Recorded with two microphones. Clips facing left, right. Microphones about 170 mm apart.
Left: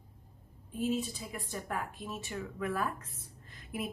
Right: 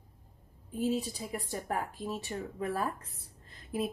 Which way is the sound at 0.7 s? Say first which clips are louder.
Right 1 dB; 40° right (ahead or behind).